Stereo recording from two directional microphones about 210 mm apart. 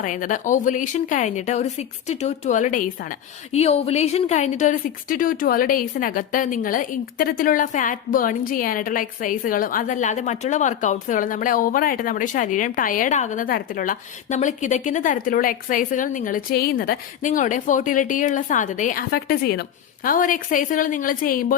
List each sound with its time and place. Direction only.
0.0 s a woman's voice: 40° left (ahead or behind)